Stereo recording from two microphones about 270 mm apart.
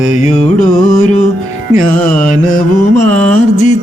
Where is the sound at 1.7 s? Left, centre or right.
Right.